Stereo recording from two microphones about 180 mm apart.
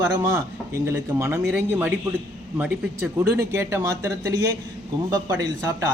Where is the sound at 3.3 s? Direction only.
15° right (ahead or behind).